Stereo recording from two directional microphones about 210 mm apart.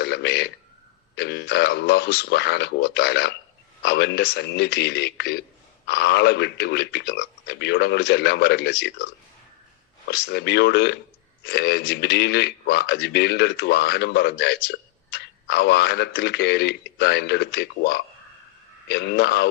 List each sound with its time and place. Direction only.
0.0 s a sound: 50° left (ahead or behind)
1.1 s a man's voice: 55° left (ahead or behind)
10.1 s a man's voice: 50° left (ahead or behind)